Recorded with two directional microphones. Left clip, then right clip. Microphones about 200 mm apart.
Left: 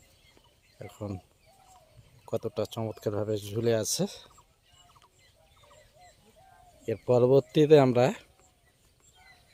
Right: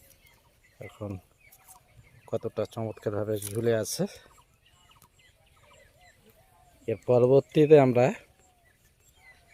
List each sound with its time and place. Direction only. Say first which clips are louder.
0.8 s speech: even; 15° left (ahead or behind)
2.2 s speech: right 1 dB; 5° left (ahead or behind)
6.8 s speech: right 1 dB; 5° left (ahead or behind)